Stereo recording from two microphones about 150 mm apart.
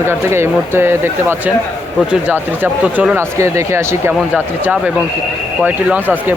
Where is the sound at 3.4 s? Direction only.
20° right (ahead or behind).